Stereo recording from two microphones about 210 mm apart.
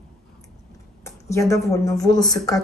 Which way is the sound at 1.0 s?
15° left (ahead or behind).